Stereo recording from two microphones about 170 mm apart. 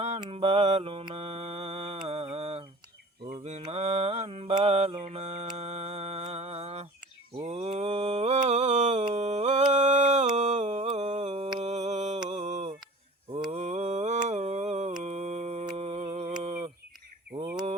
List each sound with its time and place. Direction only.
0.2 s mantra: 35° right (ahead or behind)
10.3 s a sound: 45° right (ahead or behind)
10.9 s humming: 40° right (ahead or behind)
11.6 s mantra: 40° right (ahead or behind)
15.7 s humming: 40° right (ahead or behind)
16.4 s a sound: 40° right (ahead or behind)
17.3 s bird: 25° right (ahead or behind)